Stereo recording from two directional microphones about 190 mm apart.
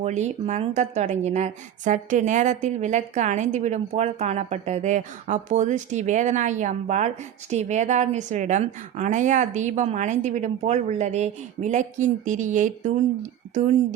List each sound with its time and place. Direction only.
0.0 s speech: 35° right (ahead or behind)